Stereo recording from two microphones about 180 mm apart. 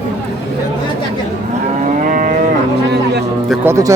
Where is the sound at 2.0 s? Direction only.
45° right (ahead or behind).